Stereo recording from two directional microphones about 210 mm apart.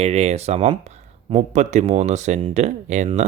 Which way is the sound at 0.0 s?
30° right (ahead or behind).